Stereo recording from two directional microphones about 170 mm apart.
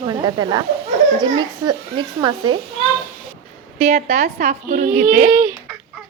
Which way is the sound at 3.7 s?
40° right (ahead or behind).